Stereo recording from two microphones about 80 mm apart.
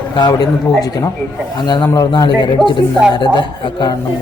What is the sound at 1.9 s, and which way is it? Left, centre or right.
A man's voice, left.